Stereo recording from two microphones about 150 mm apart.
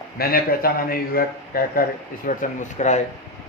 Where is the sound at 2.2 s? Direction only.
60° left (ahead or behind).